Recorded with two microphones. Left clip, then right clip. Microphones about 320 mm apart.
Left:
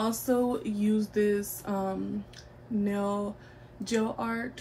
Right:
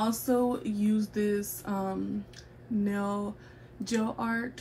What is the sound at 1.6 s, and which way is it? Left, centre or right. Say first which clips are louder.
Speech: left 2 dB; centre.